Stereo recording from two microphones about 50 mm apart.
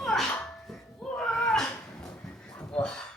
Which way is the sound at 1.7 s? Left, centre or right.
Left.